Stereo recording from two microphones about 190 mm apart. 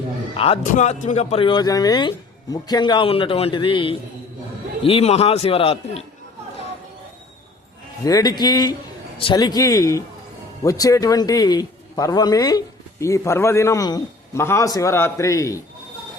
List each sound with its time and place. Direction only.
0.3 s a man's voice: 30° left (ahead or behind)
0.6 s a man's voice: 40° left (ahead or behind)
8.0 s a man's voice: 20° left (ahead or behind)